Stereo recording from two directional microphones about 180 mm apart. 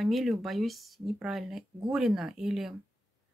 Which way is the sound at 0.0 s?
Centre (ahead or behind).